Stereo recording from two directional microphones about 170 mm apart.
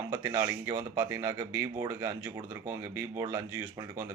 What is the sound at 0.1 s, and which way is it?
Speech, 15° right (ahead or behind).